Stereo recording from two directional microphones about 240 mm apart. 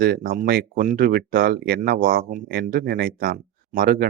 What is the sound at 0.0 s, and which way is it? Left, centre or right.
Speech, right.